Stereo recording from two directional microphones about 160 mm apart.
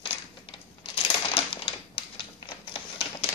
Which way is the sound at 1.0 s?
35° left (ahead or behind).